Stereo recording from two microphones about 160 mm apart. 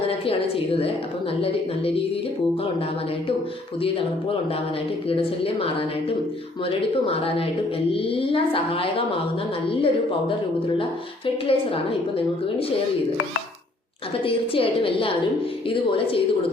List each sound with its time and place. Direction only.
0.1 s a woman's voice: 35° left (ahead or behind)
5.0 s a woman's voice: 35° left (ahead or behind)
6.7 s a woman's voice: 35° left (ahead or behind)
11.4 s a woman's voice: 35° left (ahead or behind)
14.3 s a woman's voice: 35° left (ahead or behind)